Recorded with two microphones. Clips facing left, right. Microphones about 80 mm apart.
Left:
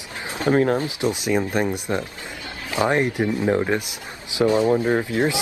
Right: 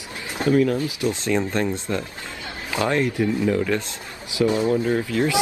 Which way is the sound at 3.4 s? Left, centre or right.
Left.